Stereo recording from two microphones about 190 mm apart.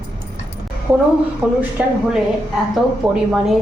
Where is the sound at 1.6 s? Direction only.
5° right (ahead or behind).